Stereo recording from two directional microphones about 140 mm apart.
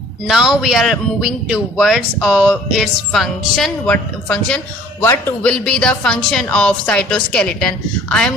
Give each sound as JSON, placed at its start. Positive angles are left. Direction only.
{"t": 0.3, "sound": "a woman's voice", "side_deg": -5}
{"t": 5.5, "sound": "a woman's voice", "side_deg": 5}